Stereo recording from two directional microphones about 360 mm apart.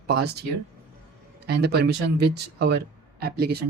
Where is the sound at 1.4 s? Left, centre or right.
Right.